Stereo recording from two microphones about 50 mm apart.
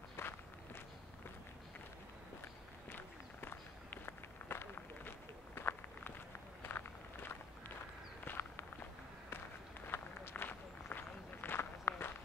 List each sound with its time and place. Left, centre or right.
0.2 s walk: left
2.9 s run: left
6.6 s walk: left
9.8 s run: left